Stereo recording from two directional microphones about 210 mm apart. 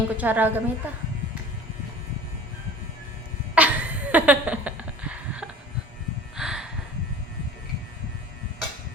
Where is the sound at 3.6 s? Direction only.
5° right (ahead or behind).